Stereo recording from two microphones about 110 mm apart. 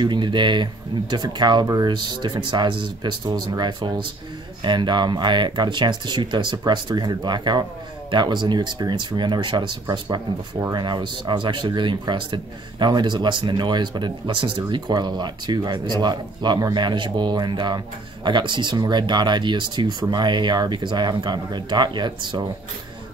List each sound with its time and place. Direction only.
0.0 s speech: 45° right (ahead or behind)